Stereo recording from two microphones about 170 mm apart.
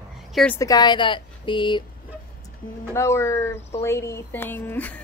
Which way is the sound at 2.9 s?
15° left (ahead or behind).